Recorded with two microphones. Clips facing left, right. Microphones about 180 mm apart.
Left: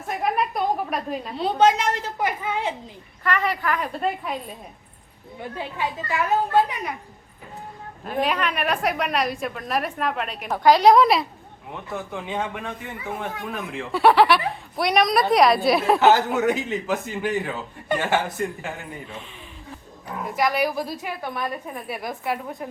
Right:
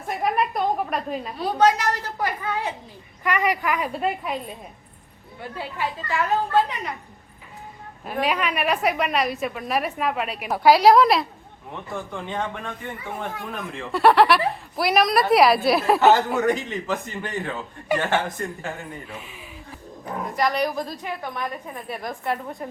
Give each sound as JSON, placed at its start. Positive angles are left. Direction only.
{"t": 0.2, "sound": "a sound", "side_deg": 0}
{"t": 1.4, "sound": "a child's voice", "side_deg": 25}
{"t": 3.2, "sound": "a woman's voice", "side_deg": -15}
{"t": 5.4, "sound": "a woman's voice", "side_deg": 15}
{"t": 8.0, "sound": "a woman's voice", "side_deg": -5}
{"t": 20.3, "sound": "speech", "side_deg": 5}